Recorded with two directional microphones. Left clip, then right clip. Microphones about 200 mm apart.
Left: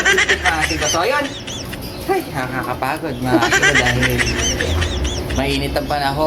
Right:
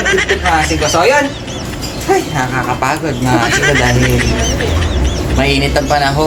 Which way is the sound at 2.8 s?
15° left (ahead or behind).